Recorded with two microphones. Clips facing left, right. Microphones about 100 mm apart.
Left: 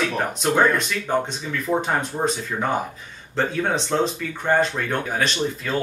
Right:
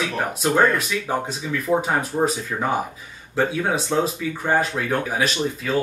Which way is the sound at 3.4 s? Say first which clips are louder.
Right 1 dB; 5° right (ahead or behind).